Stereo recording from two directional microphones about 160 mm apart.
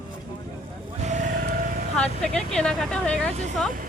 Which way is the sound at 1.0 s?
50° right (ahead or behind).